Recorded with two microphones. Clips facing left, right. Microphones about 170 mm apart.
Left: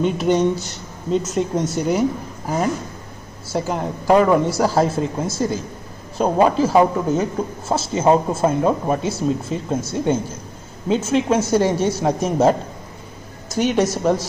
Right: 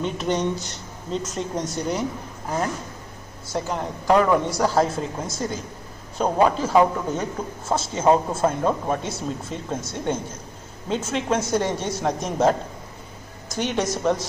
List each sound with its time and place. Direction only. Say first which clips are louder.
0.0 s a man's voice: left 7 dB; 5° left (ahead or behind)